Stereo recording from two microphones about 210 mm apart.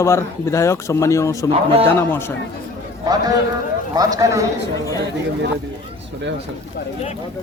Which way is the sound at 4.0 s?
15° right (ahead or behind).